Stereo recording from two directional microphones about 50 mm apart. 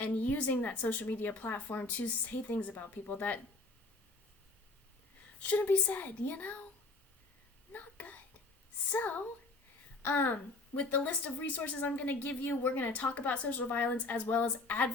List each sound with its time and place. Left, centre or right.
0.0 s a woman's voice: left
5.4 s a woman's voice: left
7.7 s whispering: left
8.9 s a woman's voice: left